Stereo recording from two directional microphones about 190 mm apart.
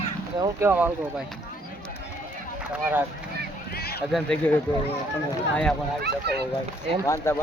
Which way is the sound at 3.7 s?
55° left (ahead or behind).